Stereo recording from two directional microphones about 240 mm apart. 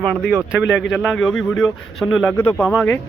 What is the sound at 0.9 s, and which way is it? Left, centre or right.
Speech, centre.